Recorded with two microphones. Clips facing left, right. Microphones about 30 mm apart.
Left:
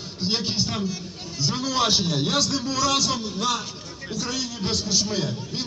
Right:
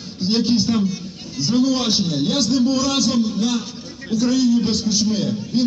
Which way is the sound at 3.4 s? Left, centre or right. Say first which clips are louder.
Right 4 dB; left.